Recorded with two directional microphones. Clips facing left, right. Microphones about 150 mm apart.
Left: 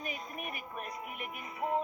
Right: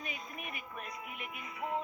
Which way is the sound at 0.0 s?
40° left (ahead or behind).